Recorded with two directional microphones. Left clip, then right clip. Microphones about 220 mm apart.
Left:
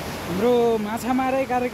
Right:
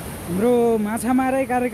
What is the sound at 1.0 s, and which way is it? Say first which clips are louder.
Speech: right 2 dB; 30° right (ahead or behind).